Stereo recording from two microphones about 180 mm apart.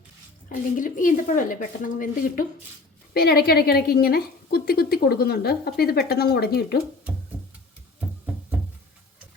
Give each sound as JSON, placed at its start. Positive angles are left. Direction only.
{"t": 0.4, "sound": "speech", "side_deg": 50}
{"t": 3.2, "sound": "a woman's voice", "side_deg": 60}